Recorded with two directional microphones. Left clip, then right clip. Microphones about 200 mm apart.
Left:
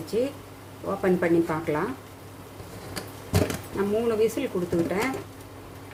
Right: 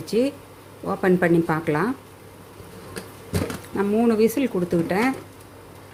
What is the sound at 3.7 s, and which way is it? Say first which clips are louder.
Speech: right 5 dB; 35° right (ahead or behind).